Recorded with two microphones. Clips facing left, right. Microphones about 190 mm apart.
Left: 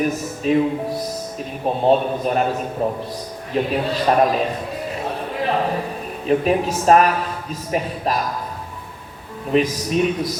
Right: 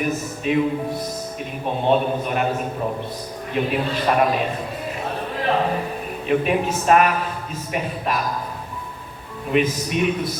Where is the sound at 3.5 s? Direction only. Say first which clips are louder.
Left 2 dB; 35° left (ahead or behind).